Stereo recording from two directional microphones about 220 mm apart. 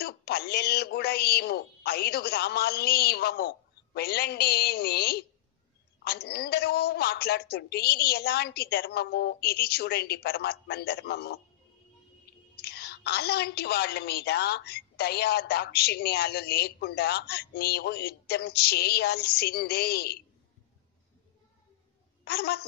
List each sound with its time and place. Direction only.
0.0 s a woman's voice: 45° left (ahead or behind)
12.5 s a woman's voice: 45° left (ahead or behind)
22.2 s a woman's voice: 45° left (ahead or behind)